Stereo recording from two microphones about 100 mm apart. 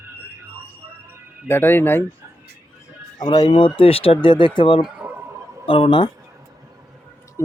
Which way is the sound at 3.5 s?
60° left (ahead or behind).